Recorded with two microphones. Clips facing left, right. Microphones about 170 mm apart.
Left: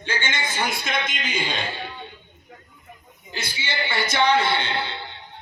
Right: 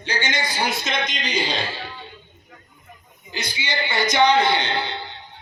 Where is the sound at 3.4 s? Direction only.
30° left (ahead or behind).